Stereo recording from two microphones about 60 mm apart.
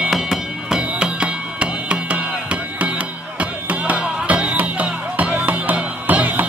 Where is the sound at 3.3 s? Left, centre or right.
Right.